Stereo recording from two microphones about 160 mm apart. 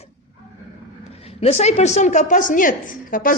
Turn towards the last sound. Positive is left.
turn(degrees=60)  # may be behind; listen again after turning